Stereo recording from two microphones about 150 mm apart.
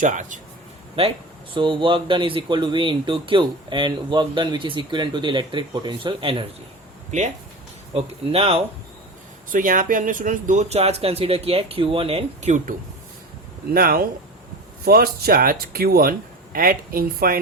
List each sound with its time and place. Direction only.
0.0 s a man's voice: 60° right (ahead or behind)
1.5 s speech: 35° right (ahead or behind)
7.9 s speech: 45° right (ahead or behind)
9.5 s speech: 65° right (ahead or behind)
13.7 s speech: 80° right